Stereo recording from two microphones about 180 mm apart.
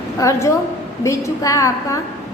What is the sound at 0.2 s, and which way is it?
A woman's voice, 15° left (ahead or behind).